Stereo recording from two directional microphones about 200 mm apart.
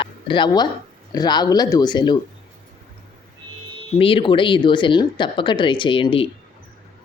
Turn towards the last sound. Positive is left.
turn(degrees=25)  # may be behind; listen again after turning